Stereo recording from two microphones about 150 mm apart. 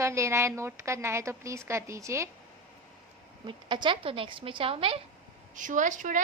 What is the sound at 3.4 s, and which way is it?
A woman's voice, 30° right (ahead or behind).